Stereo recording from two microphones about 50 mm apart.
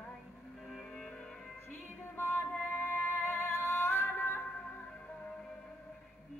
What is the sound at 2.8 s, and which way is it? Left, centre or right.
Music, left.